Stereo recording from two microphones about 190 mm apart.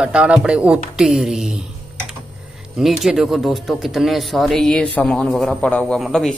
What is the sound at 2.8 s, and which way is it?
Speech, centre (ahead or behind).